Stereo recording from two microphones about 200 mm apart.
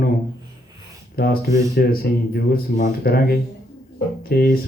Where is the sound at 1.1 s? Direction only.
50° left (ahead or behind).